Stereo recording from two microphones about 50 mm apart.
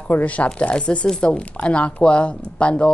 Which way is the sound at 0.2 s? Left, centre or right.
Left.